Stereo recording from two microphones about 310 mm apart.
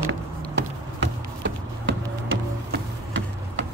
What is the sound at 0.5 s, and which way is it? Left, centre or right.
Music, right.